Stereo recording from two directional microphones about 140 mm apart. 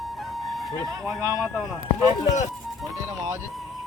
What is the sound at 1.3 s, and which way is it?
Speech, centre (ahead or behind).